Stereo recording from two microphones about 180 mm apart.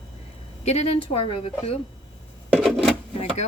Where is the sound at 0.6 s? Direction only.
35° left (ahead or behind).